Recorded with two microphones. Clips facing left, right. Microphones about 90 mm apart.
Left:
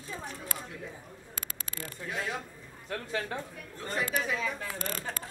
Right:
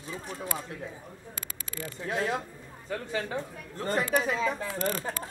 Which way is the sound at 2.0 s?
40° right (ahead or behind).